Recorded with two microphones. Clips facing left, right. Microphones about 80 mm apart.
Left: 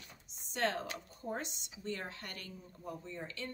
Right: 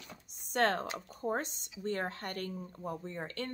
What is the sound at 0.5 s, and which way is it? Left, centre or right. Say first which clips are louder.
Speech: right 5 dB; right.